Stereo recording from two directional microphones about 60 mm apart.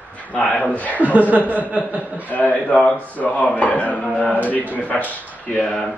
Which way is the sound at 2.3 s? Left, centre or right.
Left.